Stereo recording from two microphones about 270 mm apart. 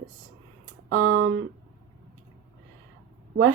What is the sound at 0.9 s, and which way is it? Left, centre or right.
Speech, right.